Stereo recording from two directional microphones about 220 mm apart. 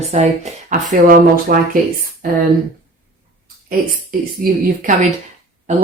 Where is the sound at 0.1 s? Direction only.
35° right (ahead or behind).